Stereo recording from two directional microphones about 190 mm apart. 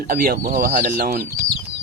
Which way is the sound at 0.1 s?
50° right (ahead or behind).